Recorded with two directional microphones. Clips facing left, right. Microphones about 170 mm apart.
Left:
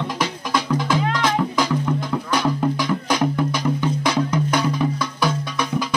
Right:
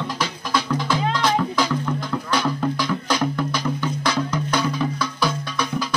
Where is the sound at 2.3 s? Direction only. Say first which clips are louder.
Left 2 dB; 15° left (ahead or behind).